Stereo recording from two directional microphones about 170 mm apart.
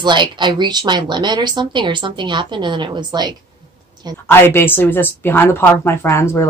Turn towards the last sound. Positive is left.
turn(degrees=15)  # may be behind; listen again after turning